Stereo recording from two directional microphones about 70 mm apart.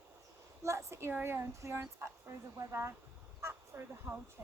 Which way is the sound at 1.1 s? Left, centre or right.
Right.